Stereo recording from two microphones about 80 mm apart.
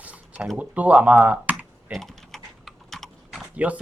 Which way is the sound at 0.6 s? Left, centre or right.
Centre.